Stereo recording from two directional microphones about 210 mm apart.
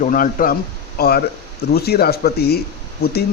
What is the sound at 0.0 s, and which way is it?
Speech, 40° left (ahead or behind).